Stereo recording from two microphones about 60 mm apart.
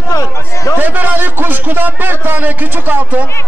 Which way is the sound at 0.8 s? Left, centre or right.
Right.